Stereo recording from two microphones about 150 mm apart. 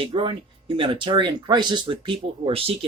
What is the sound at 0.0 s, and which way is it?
Speech, 35° right (ahead or behind).